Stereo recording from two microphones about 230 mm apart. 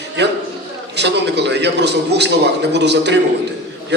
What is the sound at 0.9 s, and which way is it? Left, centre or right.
A man's voice, right.